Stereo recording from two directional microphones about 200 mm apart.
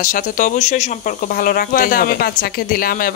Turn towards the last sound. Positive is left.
turn(degrees=45)  # may be behind; listen again after turning